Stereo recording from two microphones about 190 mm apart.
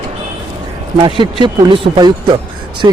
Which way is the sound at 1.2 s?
25° right (ahead or behind).